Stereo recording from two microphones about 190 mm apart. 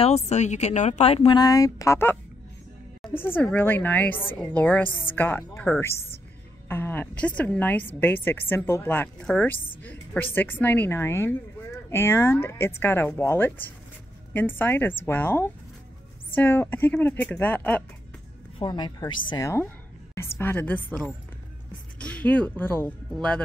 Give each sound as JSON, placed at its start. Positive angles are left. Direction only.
{"t": 0.0, "sound": "speech", "side_deg": 35}
{"t": 1.4, "sound": "a woman's voice", "side_deg": 20}
{"t": 18.6, "sound": "a woman's voice", "side_deg": 25}